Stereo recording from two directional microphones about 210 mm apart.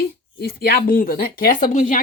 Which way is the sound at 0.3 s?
50° left (ahead or behind).